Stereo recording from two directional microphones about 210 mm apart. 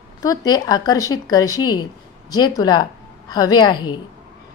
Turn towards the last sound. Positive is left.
turn(degrees=20)  # may be behind; listen again after turning